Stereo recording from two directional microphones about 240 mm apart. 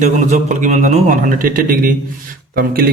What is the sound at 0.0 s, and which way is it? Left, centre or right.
A man's voice, right.